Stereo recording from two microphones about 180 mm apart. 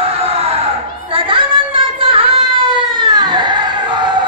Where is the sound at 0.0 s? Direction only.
35° right (ahead or behind).